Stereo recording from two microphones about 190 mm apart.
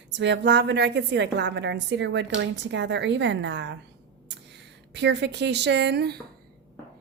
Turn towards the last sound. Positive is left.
turn(degrees=-60)  # may be behind; listen again after turning